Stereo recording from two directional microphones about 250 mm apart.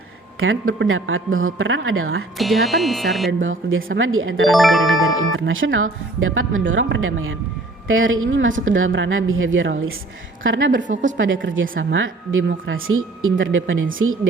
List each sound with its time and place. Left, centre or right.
0.3 s speech: right
2.4 s speech: centre
3.4 s speech: right
4.4 s speech: centre
5.0 s speech: right